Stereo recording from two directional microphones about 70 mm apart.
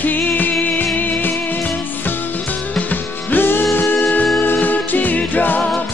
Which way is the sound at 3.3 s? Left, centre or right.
Left.